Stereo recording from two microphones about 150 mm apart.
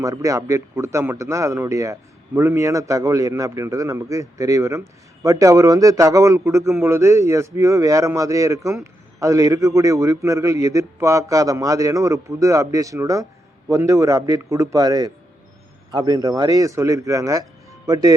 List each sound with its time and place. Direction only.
0.0 s speech: 20° right (ahead or behind)